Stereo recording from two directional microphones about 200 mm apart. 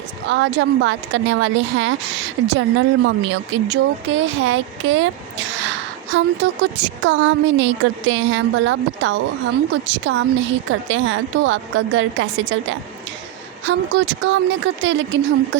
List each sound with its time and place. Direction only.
0.3 s a woman's voice: 65° right (ahead or behind)